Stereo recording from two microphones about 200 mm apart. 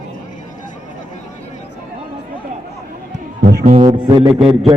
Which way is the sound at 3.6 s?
30° right (ahead or behind).